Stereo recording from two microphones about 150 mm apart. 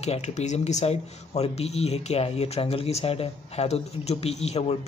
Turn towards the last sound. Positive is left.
turn(degrees=45)  # may be behind; listen again after turning